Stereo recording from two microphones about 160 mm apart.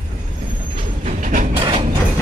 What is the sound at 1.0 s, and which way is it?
Train, 50° right (ahead or behind).